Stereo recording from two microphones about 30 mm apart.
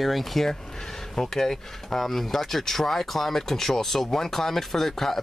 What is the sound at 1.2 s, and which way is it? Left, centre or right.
Speech, centre.